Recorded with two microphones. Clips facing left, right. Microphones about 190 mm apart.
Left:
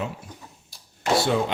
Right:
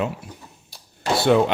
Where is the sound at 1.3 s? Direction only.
65° right (ahead or behind).